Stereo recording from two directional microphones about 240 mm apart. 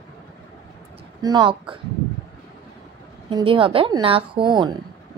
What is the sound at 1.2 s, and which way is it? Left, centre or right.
Speech, centre.